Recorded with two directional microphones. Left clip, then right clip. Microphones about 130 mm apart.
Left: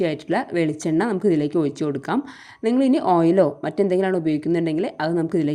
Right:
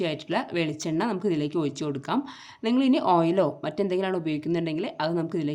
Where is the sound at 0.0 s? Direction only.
35° left (ahead or behind).